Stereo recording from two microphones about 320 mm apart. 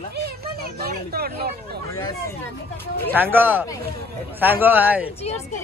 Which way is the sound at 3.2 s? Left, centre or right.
Centre.